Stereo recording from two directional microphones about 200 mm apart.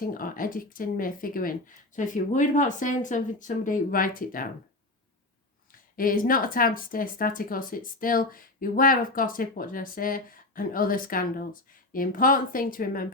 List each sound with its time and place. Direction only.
0.0 s speech: 45° left (ahead or behind)
6.0 s speech: 45° left (ahead or behind)